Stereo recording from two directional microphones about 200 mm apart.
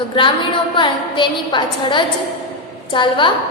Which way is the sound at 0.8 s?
25° left (ahead or behind).